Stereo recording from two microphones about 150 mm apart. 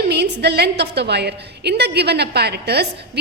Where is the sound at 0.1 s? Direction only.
90° right.